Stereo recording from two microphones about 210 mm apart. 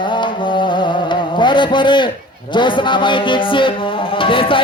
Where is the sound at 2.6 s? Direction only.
25° left (ahead or behind).